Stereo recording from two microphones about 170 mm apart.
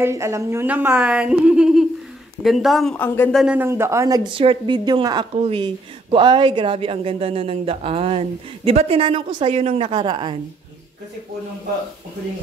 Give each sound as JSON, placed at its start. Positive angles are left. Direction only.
{"t": 0.0, "sound": "speech", "side_deg": -15}
{"t": 3.4, "sound": "a woman's voice", "side_deg": -10}